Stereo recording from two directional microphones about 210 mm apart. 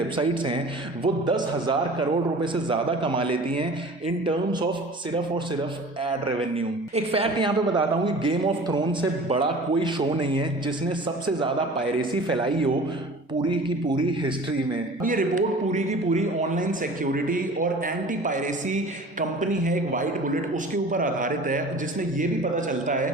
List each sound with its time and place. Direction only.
0.2 s a man's voice: 25° right (ahead or behind)
6.9 s a man's voice: 25° right (ahead or behind)
12.3 s a man's voice: 25° right (ahead or behind)
15.0 s a man's voice: 40° right (ahead or behind)